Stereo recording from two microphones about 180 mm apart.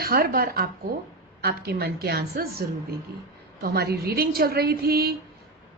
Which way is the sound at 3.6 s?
60° right (ahead or behind).